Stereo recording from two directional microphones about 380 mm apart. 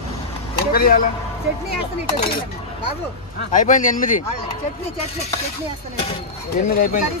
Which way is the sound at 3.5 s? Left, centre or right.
Left.